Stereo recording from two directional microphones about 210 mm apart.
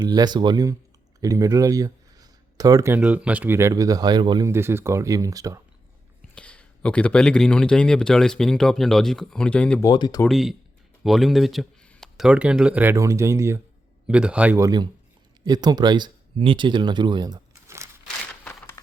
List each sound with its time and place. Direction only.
0.0 s speech: 20° right (ahead or behind)
6.3 s speech: 5° left (ahead or behind)
9.8 s speech: 20° left (ahead or behind)
10.2 s speech: centre (ahead or behind)
18.4 s a sound: 10° left (ahead or behind)